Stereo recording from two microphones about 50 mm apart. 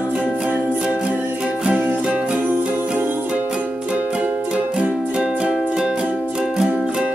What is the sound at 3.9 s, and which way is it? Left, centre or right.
Music, right.